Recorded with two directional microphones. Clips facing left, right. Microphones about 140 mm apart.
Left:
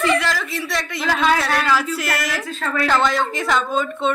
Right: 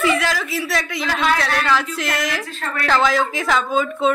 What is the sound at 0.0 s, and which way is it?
Speech, 5° right (ahead or behind).